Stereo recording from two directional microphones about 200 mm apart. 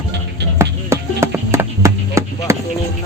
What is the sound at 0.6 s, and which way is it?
Music, 15° right (ahead or behind).